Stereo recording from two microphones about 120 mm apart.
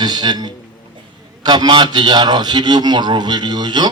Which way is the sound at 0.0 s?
35° right (ahead or behind).